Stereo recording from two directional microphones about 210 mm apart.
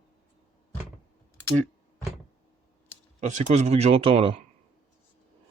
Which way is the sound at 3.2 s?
35° right (ahead or behind).